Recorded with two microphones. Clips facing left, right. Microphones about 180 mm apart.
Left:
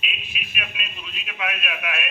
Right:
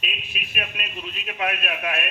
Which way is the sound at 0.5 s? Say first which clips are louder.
Right 4 dB; 40° right (ahead or behind).